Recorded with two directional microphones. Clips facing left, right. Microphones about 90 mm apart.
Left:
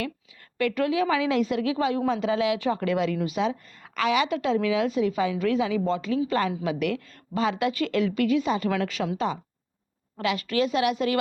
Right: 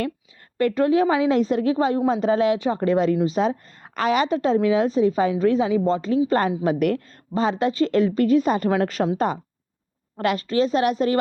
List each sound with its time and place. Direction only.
0.7 s a woman's voice: 35° right (ahead or behind)
9.1 s a woman's voice: 50° right (ahead or behind)
10.4 s a woman's voice: 30° right (ahead or behind)